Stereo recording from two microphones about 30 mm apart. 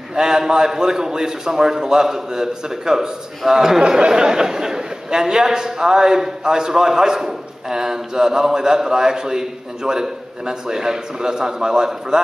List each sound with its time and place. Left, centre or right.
0.1 s a man's voice: right